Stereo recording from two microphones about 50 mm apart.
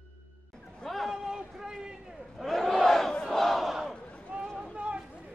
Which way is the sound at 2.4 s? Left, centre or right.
Centre.